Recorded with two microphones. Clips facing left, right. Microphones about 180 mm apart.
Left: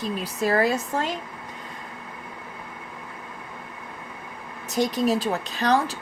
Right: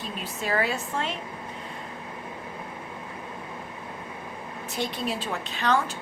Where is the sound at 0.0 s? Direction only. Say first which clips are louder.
Left 7 dB; 40° left (ahead or behind).